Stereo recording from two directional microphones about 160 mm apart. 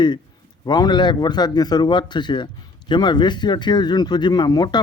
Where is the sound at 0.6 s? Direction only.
25° left (ahead or behind).